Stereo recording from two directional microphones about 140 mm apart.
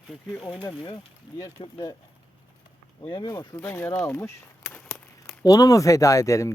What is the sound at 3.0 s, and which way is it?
Speech, 30° left (ahead or behind).